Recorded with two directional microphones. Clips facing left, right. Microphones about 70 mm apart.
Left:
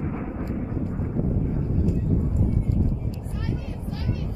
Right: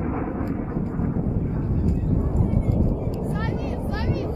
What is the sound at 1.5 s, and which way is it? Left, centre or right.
Vehicle, right.